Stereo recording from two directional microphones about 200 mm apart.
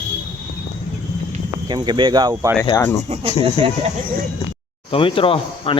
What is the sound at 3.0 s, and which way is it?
Speech, 30° right (ahead or behind).